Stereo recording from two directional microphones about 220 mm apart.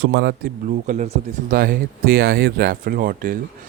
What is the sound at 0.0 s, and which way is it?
Speech, 50° right (ahead or behind).